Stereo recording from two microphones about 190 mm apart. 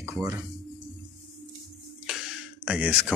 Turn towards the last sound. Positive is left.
turn(degrees=-5)  # may be behind; listen again after turning